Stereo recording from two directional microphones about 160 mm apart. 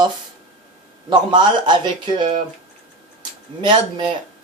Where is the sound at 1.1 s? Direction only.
30° right (ahead or behind).